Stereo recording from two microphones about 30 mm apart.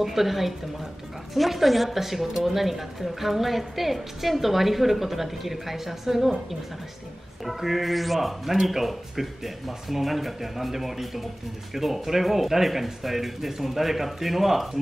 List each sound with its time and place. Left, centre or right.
0.0 s speech: centre
7.4 s speech: centre